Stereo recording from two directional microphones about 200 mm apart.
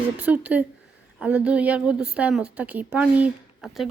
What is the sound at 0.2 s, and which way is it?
A woman's voice, 5° right (ahead or behind).